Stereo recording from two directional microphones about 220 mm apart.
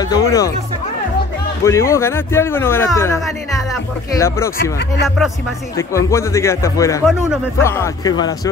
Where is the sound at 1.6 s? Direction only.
15° left (ahead or behind).